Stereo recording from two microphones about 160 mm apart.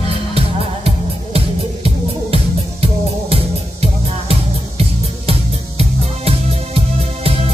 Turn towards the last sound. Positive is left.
turn(degrees=-40)  # may be behind; listen again after turning